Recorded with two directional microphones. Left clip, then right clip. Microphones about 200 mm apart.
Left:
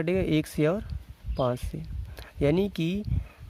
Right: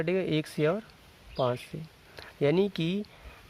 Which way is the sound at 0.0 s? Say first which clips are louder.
Left 2 dB; 35° left (ahead or behind).